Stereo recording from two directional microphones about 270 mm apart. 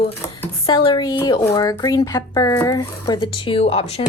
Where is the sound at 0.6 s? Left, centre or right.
Centre.